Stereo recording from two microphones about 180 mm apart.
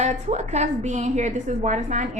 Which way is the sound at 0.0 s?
40° right (ahead or behind).